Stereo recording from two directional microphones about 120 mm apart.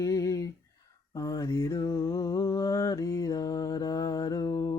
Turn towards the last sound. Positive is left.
turn(degrees=25)  # may be behind; listen again after turning